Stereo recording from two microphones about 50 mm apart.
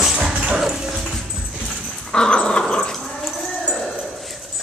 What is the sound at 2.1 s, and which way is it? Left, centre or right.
Dog, centre.